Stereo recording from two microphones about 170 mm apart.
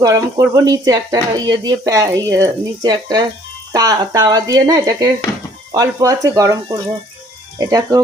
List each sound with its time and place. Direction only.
0.0 s speech: 20° right (ahead or behind)